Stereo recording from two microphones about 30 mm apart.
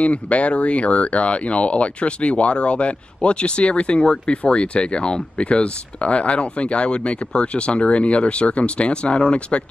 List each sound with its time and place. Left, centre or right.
0.0 s speech: left